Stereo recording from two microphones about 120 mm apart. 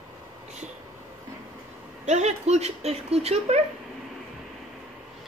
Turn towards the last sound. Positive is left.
turn(degrees=-60)  # may be behind; listen again after turning